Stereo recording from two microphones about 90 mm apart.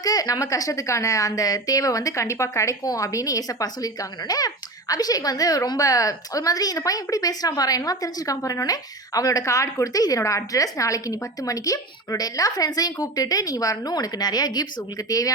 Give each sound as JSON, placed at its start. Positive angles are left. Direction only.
{"t": 0.0, "sound": "a woman's voice", "side_deg": 40}